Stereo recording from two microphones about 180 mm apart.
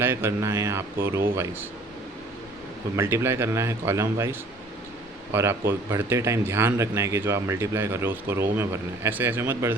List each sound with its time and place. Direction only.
0.0 s a man's voice: 15° right (ahead or behind)
2.9 s a man's voice: 15° right (ahead or behind)